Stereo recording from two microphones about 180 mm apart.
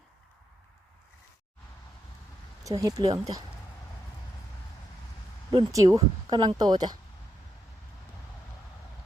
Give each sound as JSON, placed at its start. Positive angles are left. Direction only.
{"t": 2.6, "sound": "speech", "side_deg": -20}
{"t": 5.5, "sound": "speech", "side_deg": -20}